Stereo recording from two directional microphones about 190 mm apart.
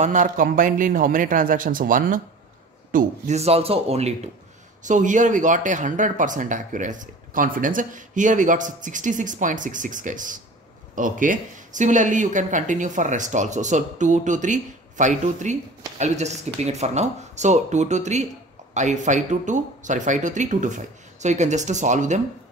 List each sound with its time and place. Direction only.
0.0 s speech: 40° right (ahead or behind)